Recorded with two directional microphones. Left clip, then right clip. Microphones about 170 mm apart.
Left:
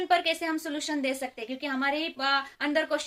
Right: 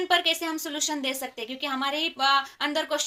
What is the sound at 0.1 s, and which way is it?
A woman's voice, 20° left (ahead or behind).